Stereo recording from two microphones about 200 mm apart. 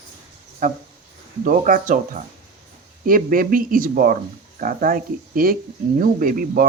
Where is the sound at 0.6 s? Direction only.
40° right (ahead or behind).